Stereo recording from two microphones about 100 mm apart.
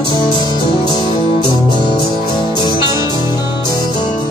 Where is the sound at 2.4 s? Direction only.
45° left (ahead or behind).